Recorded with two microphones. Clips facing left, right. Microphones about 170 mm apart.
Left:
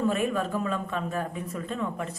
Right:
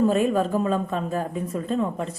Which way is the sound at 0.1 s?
35° right (ahead or behind).